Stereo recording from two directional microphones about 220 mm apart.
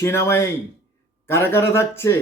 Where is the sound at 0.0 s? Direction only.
10° left (ahead or behind).